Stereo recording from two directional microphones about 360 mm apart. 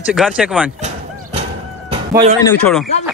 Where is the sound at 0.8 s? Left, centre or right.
Centre.